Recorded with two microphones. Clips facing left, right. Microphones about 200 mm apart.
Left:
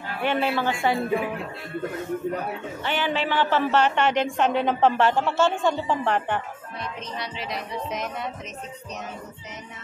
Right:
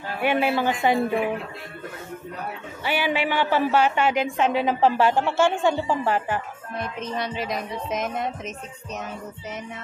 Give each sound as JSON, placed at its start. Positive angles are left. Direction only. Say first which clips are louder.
{"t": 0.2, "sound": "a woman's voice", "louder": "right 2 dB", "side_deg": -10}
{"t": 2.8, "sound": "a woman's voice", "louder": "right 2 dB", "side_deg": -10}
{"t": 6.8, "sound": "music", "louder": "right 5 dB", "side_deg": -50}